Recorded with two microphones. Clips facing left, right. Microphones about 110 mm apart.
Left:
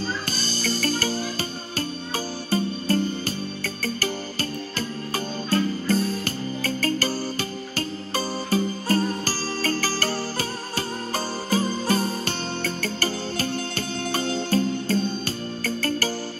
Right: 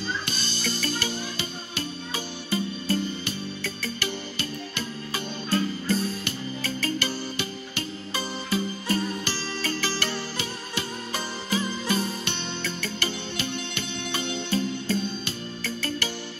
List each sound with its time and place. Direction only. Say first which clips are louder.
0.0 s music: left 3 dB; 40° left (ahead or behind)